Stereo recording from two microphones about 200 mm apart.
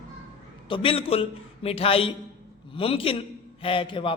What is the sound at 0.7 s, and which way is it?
A man's voice, 25° left (ahead or behind).